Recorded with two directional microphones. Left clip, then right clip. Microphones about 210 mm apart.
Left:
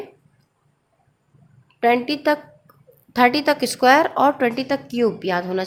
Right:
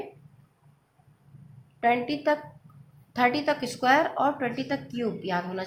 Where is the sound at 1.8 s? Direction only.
50° left (ahead or behind).